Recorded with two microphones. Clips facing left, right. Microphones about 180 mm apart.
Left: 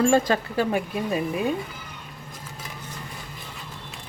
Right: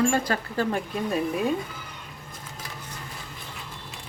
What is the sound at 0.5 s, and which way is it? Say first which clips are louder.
Speech: left 2 dB; 5° left (ahead or behind).